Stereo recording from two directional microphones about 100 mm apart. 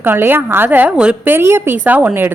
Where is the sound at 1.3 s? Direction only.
25° right (ahead or behind).